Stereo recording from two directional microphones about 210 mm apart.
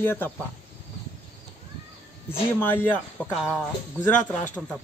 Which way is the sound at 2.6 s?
10° left (ahead or behind).